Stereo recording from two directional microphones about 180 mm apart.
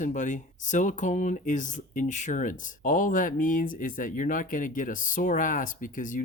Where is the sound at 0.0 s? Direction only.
45° left (ahead or behind).